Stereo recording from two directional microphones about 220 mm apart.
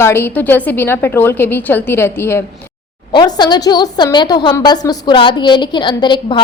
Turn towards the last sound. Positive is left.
turn(degrees=20)  # may be behind; listen again after turning